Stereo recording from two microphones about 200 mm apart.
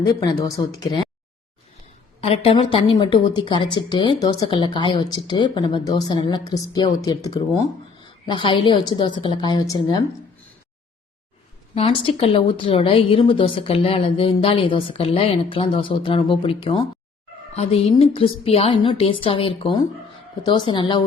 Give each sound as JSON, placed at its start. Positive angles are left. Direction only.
{"t": 0.0, "sound": "speech", "side_deg": 20}
{"t": 2.2, "sound": "speech", "side_deg": 30}
{"t": 11.7, "sound": "speech", "side_deg": 30}